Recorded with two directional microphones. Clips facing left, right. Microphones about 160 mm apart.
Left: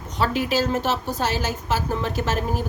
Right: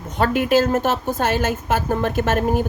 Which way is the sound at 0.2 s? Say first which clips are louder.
Right 5 dB; 55° right (ahead or behind).